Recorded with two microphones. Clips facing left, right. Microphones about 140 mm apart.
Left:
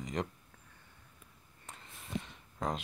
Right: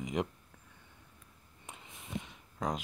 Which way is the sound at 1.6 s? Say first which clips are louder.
Right 1 dB; 10° right (ahead or behind).